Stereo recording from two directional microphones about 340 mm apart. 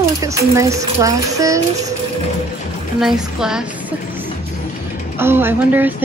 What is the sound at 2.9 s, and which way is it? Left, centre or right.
A woman's voice, centre.